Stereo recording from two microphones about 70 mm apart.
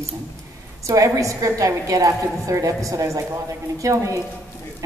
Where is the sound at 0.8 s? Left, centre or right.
Right.